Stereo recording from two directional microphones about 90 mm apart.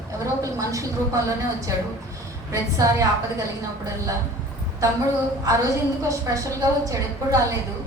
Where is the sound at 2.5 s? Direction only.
40° right (ahead or behind).